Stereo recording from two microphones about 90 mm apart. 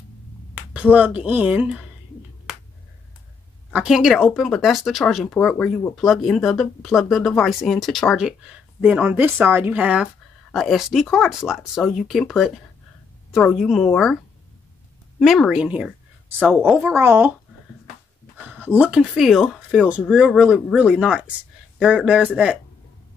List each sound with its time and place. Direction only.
0.9 s speech: 15° right (ahead or behind)
3.7 s speech: 5° right (ahead or behind)
9.0 s speech: 20° right (ahead or behind)
10.5 s speech: centre (ahead or behind)
15.1 s speech: centre (ahead or behind)
15.5 s speech: 10° right (ahead or behind)
16.9 s speech: 25° right (ahead or behind)
18.5 s a sound: 20° right (ahead or behind)
18.9 s speech: 5° right (ahead or behind)